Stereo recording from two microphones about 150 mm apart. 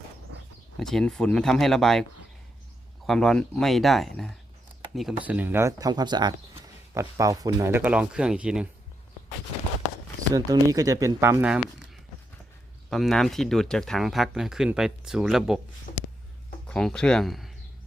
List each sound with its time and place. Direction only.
0.8 s speech: 5° left (ahead or behind)
3.1 s speech: 5° left (ahead or behind)
10.3 s speech: 25° right (ahead or behind)
12.9 s speech: centre (ahead or behind)
15.9 s a sound: 65° left (ahead or behind)
16.6 s speech: 5° left (ahead or behind)